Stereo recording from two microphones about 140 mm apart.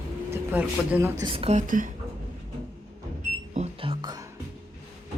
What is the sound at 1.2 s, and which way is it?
Speech, 40° right (ahead or behind).